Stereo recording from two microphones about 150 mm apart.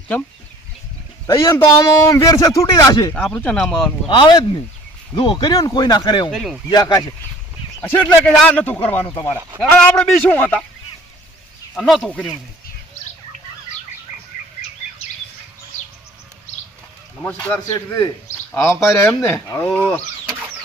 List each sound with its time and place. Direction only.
1.5 s speech: 20° left (ahead or behind)
3.2 s speech: 5° left (ahead or behind)
4.1 s speech: 30° left (ahead or behind)
6.3 s speech: centre (ahead or behind)
6.7 s speech: 25° left (ahead or behind)
7.8 s speech: 10° left (ahead or behind)
9.0 s speech: 25° left (ahead or behind)
9.6 s speech: 5° left (ahead or behind)
11.7 s speech: centre (ahead or behind)
17.2 s speech: 10° left (ahead or behind)
20.2 s bird: 10° right (ahead or behind)